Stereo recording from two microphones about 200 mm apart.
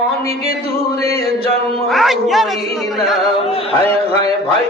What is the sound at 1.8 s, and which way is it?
Speech, centre (ahead or behind).